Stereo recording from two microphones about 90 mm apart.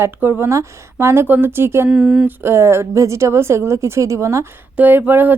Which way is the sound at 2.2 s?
30° right (ahead or behind).